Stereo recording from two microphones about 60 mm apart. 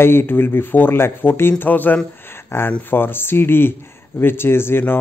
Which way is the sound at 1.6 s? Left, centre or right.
Left.